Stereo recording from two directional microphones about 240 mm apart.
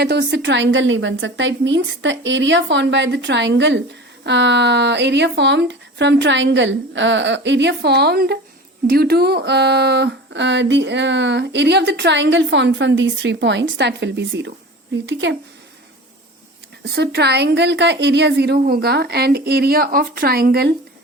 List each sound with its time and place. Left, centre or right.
0.0 s a woman's voice: right
16.9 s a woman's voice: right